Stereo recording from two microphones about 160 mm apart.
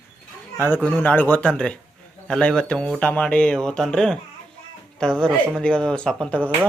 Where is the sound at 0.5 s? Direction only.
10° left (ahead or behind).